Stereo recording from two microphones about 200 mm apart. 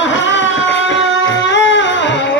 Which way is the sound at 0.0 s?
65° left (ahead or behind).